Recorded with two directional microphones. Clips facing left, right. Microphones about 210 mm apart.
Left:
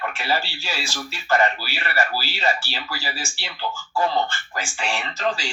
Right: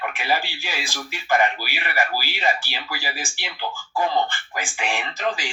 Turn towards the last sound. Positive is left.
turn(degrees=-15)  # may be behind; listen again after turning